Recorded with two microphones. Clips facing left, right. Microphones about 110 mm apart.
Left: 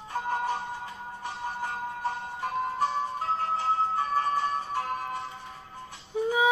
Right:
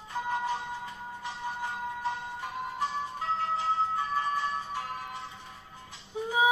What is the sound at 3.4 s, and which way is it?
Music, 45° left (ahead or behind).